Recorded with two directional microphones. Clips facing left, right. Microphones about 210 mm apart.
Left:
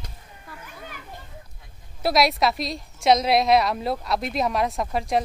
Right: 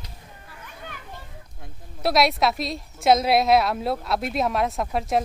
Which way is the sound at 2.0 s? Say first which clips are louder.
Even; centre (ahead or behind).